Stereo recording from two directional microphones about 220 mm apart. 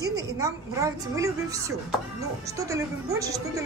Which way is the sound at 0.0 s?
15° right (ahead or behind).